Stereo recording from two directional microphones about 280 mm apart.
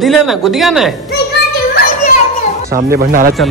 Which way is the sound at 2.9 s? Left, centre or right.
Right.